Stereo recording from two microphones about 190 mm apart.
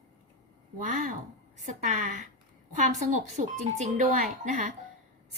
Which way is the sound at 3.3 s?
40° right (ahead or behind).